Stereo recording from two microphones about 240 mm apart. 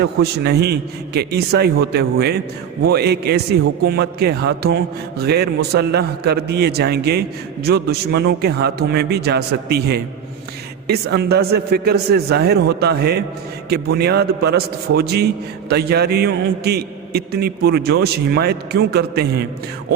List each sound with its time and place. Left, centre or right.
0.0 s a man's voice: right